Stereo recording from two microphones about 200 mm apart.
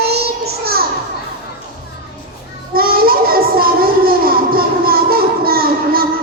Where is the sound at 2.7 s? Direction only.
50° right (ahead or behind).